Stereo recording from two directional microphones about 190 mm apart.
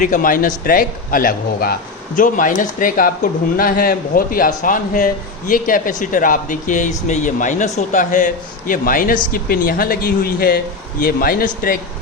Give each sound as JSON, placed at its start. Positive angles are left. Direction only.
{"t": 0.0, "sound": "a man's voice", "side_deg": 45}